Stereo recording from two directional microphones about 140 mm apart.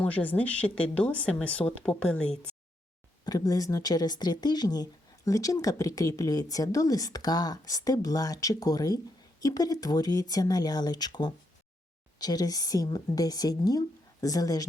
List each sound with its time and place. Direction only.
0.0 s speech: 10° left (ahead or behind)
3.2 s speech: 25° left (ahead or behind)